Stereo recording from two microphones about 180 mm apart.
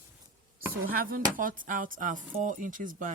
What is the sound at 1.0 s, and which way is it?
Speech, 50° right (ahead or behind).